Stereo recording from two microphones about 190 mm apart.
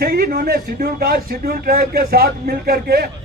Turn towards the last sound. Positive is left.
turn(degrees=-50)  # may be behind; listen again after turning